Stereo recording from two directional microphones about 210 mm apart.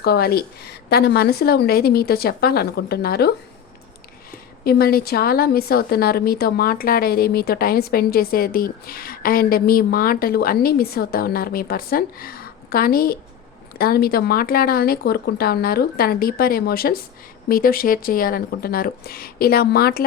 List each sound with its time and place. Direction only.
0.0 s a woman's voice: 50° left (ahead or behind)